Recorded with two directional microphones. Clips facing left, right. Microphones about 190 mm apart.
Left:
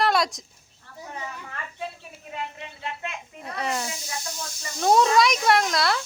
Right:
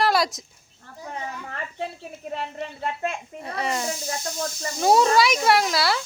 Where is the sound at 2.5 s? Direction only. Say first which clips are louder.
Right 6 dB; 45° right (ahead or behind).